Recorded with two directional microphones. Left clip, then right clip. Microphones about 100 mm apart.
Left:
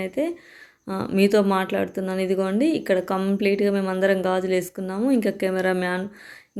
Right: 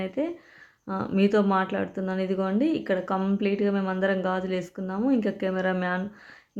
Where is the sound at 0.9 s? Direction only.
25° left (ahead or behind).